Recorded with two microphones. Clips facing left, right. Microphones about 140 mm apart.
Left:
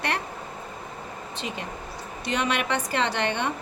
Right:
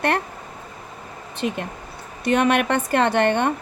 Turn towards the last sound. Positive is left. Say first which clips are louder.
# right 7 dB
turn(degrees=-50)  # may be behind; listen again after turning